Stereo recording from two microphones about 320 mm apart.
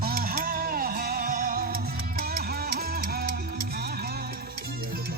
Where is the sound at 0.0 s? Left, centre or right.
Right.